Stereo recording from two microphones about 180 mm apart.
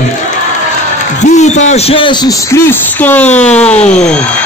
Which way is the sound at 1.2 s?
40° left (ahead or behind).